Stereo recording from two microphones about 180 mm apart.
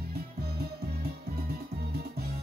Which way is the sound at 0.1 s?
60° right (ahead or behind).